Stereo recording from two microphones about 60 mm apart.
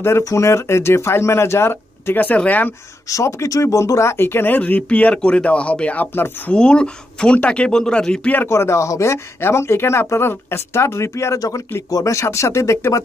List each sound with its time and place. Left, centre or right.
0.2 s speech: left
2.1 s speech: left
3.1 s speech: left
4.6 s speech: left
8.5 s speech: left
11.3 s speech: left
11.9 s speech: left